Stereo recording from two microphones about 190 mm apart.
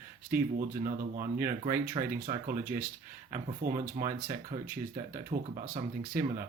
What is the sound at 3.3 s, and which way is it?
Speech, 45° right (ahead or behind).